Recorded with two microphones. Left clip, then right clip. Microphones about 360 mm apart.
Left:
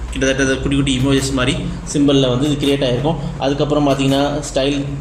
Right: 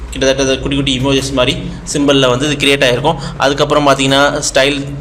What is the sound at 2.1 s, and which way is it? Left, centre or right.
Speech, right.